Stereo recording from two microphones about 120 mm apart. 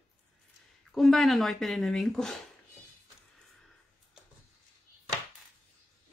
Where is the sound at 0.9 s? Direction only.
Centre (ahead or behind).